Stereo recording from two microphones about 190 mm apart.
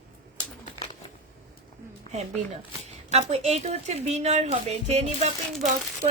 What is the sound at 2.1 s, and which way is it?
A woman's voice, 35° right (ahead or behind).